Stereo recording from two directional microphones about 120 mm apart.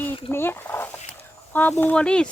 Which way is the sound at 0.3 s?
20° left (ahead or behind).